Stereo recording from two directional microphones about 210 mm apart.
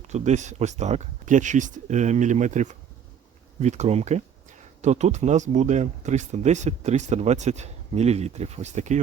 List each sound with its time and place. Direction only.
0.1 s speech: 35° right (ahead or behind)